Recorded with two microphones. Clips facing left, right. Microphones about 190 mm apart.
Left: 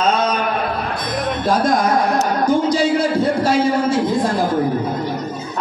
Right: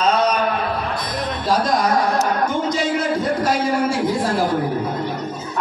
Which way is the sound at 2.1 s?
35° left (ahead or behind).